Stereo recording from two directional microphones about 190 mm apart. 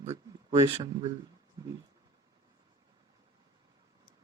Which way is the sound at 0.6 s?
20° right (ahead or behind).